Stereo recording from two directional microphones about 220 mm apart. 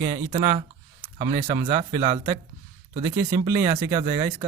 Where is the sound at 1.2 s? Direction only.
25° right (ahead or behind).